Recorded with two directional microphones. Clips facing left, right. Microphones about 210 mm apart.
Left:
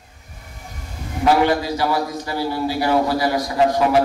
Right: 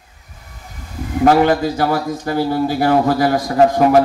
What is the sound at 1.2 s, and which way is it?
A man's voice, 50° right (ahead or behind).